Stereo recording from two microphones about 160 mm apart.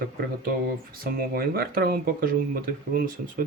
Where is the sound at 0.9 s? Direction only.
70° right (ahead or behind).